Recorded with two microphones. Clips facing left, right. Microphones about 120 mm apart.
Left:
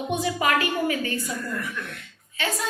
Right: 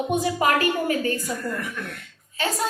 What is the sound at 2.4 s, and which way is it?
Speech, 40° right (ahead or behind).